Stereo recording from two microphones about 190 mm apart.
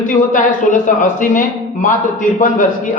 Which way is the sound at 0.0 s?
45° left (ahead or behind).